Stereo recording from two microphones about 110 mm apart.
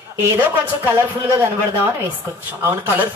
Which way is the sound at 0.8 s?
25° right (ahead or behind).